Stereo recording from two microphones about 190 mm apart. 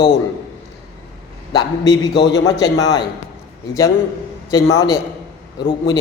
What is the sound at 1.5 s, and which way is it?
A man's voice, 20° left (ahead or behind).